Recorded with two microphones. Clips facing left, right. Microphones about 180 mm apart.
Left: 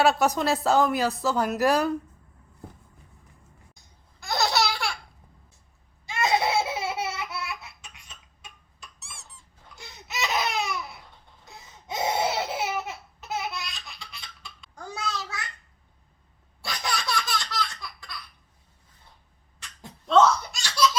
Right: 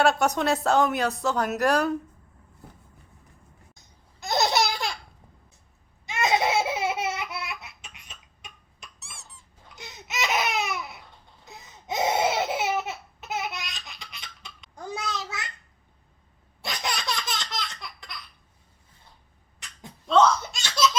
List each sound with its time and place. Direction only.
0.0 s a woman's voice: centre (ahead or behind)
3.8 s laughter: 20° right (ahead or behind)
6.1 s laughter: 20° right (ahead or behind)
9.0 s squeak: centre (ahead or behind)
9.7 s laughter: 20° right (ahead or behind)
16.6 s baby laughter: 20° right (ahead or behind)
19.8 s a sound: centre (ahead or behind)
20.4 s laughter: 25° right (ahead or behind)